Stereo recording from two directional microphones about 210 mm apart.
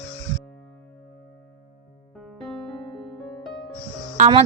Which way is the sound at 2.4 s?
Centre (ahead or behind).